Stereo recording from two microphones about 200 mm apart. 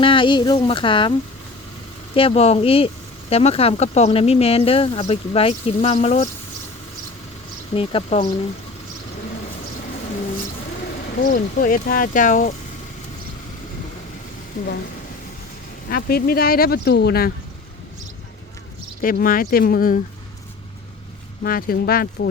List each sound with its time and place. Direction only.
0.0 s speech: 25° left (ahead or behind)
2.1 s speech: 30° left (ahead or behind)
7.7 s speech: 25° left (ahead or behind)
11.2 s speech: 45° left (ahead or behind)
14.5 s speech: 40° left (ahead or behind)
15.9 s speech: 50° left (ahead or behind)
19.0 s speech: 45° left (ahead or behind)
21.4 s speech: 45° left (ahead or behind)